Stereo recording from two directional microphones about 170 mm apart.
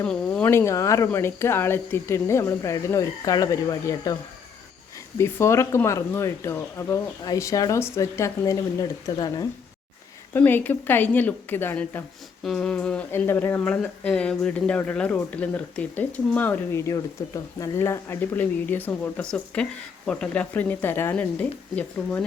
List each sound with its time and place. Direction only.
0.0 s speech: 5° left (ahead or behind); by 9.5 s 25° left (ahead or behind)
10.3 s speech: 10° left (ahead or behind)